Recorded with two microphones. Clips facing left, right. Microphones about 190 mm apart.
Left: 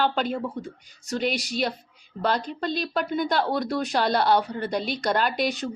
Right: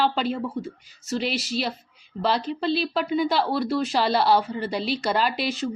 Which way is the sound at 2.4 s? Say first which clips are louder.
Right 4 dB; 5° right (ahead or behind).